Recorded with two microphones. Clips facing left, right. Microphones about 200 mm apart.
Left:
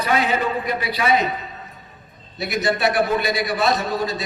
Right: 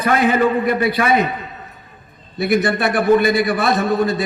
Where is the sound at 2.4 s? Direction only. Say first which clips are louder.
Right 5 dB; 55° right (ahead or behind).